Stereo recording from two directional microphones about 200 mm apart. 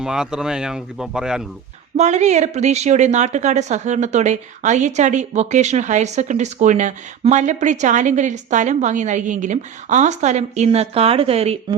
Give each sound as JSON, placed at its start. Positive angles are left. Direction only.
{"t": 0.0, "sound": "speech", "side_deg": -5}
{"t": 2.0, "sound": "speech", "side_deg": -35}